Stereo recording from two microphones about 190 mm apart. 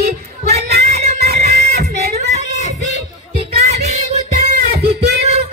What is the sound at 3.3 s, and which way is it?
Music, 35° right (ahead or behind).